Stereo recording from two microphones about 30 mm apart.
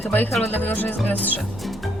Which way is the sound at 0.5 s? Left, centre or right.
Left.